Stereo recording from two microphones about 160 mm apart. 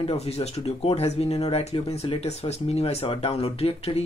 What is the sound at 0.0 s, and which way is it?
Speech, 40° left (ahead or behind).